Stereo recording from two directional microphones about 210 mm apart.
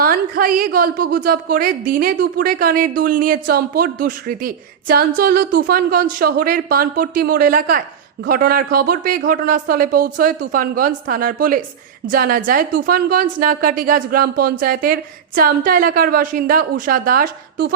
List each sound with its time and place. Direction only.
0.0 s a woman's voice: 45° right (ahead or behind)